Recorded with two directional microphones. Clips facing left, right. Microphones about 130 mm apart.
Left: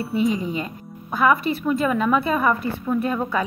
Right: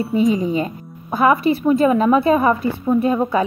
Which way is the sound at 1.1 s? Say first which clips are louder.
Right 4 dB; 30° right (ahead or behind).